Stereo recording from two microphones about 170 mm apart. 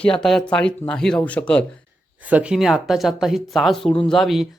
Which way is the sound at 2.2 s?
5° right (ahead or behind).